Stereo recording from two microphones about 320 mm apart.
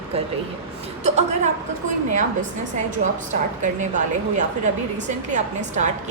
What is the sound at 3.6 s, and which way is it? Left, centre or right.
A woman's voice, right.